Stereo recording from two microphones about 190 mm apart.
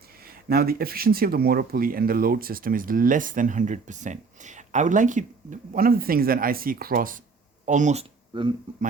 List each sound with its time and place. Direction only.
0.4 s speech: 55° right (ahead or behind)
8.3 s speech: 25° right (ahead or behind)